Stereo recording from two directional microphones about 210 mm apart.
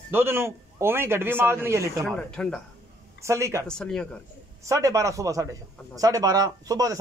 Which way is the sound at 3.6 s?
5° left (ahead or behind).